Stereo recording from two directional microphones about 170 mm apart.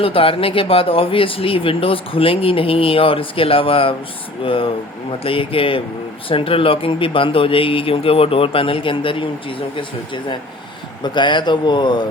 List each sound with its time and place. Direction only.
0.0 s speech: 35° left (ahead or behind)
11.0 s speech: 25° left (ahead or behind)